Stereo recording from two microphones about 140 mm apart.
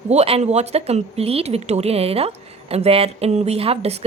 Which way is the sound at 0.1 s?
50° right (ahead or behind).